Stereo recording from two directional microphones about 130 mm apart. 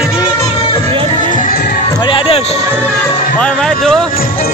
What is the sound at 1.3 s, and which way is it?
Music, 85° left.